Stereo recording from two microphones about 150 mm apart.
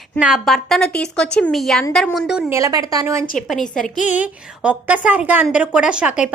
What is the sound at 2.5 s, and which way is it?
Speech, 25° right (ahead or behind).